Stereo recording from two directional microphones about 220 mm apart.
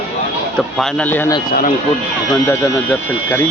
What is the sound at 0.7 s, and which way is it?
Speech, 5° left (ahead or behind).